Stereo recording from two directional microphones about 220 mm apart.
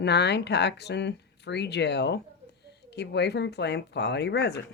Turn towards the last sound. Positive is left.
turn(degrees=50)  # may be behind; listen again after turning